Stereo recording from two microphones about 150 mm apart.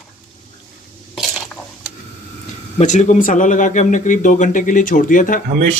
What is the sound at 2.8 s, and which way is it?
Speech, 50° left (ahead or behind).